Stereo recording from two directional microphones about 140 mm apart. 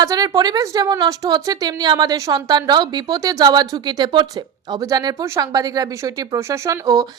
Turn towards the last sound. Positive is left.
turn(degrees=-25)  # may be behind; listen again after turning